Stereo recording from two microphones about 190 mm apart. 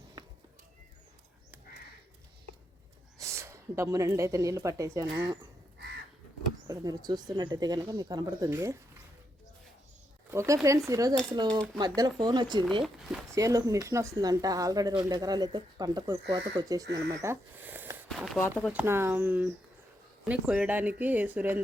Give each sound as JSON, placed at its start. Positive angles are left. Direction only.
{"t": 3.2, "sound": "a woman's voice", "side_deg": -15}
{"t": 6.7, "sound": "speech", "side_deg": -20}
{"t": 10.3, "sound": "speech", "side_deg": -15}
{"t": 18.3, "sound": "speech", "side_deg": 10}
{"t": 18.7, "sound": "speech", "side_deg": -10}